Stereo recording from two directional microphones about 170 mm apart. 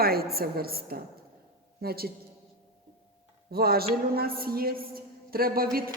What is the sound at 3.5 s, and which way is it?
A woman's voice, 65° right (ahead or behind).